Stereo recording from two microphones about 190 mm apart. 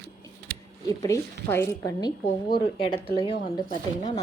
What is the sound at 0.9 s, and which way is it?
A woman's voice, 15° left (ahead or behind).